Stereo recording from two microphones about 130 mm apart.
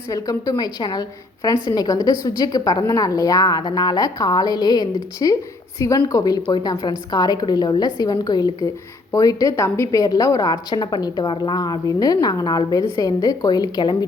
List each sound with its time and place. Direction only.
0.1 s a woman's voice: 25° left (ahead or behind)